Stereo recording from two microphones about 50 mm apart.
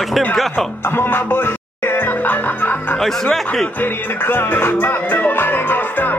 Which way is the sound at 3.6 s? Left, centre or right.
Left.